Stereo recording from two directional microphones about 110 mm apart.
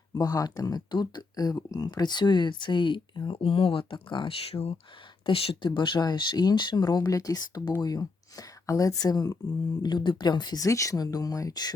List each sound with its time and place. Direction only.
0.2 s speech: 35° left (ahead or behind)
9.8 s speech: 45° left (ahead or behind)